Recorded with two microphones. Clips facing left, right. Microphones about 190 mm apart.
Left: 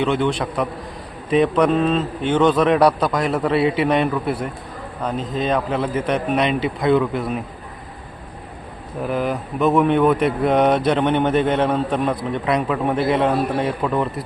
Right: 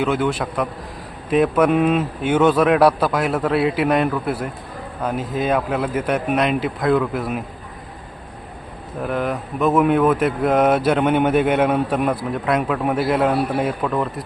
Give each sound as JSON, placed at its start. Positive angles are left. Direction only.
{"t": 0.0, "sound": "speech", "side_deg": -5}
{"t": 9.0, "sound": "speech", "side_deg": 0}